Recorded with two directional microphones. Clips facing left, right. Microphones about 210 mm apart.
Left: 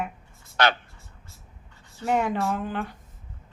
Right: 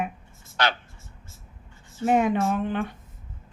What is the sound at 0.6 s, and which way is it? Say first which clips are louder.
Speech: left 3 dB; 55° left (ahead or behind).